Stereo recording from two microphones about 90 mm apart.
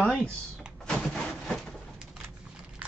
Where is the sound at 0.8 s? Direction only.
5° left (ahead or behind).